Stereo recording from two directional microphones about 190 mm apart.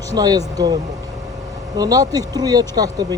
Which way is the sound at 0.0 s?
20° right (ahead or behind).